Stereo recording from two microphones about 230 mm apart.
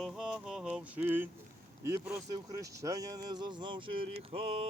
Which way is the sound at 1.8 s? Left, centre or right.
Centre.